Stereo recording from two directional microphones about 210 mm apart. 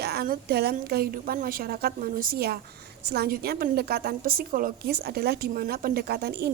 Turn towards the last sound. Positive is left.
turn(degrees=-50)  # may be behind; listen again after turning